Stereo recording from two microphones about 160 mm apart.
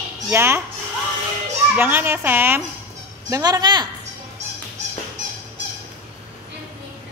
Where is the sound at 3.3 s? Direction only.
25° right (ahead or behind).